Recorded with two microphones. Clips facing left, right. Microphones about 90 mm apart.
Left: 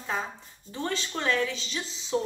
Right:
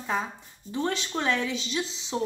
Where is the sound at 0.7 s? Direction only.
15° right (ahead or behind).